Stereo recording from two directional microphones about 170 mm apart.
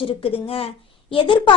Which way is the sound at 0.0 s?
35° left (ahead or behind).